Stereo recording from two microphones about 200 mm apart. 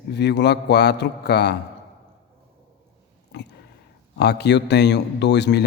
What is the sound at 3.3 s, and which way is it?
A man's voice, 60° left (ahead or behind).